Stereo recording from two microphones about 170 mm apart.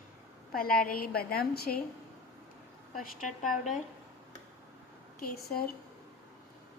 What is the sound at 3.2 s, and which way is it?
Speech, 50° left (ahead or behind).